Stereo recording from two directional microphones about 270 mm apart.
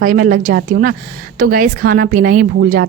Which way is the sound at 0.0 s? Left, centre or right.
Right.